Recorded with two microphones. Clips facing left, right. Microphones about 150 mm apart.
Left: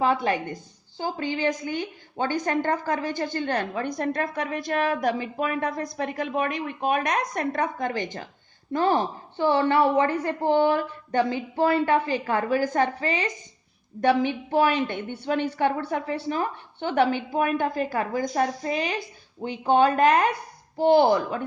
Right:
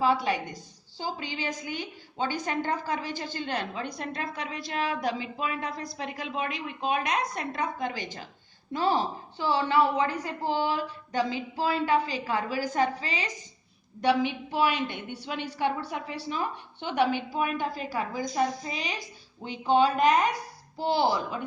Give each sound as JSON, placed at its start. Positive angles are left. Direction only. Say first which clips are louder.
{"t": 0.0, "sound": "a woman's voice", "louder": "left 2 dB", "side_deg": 50}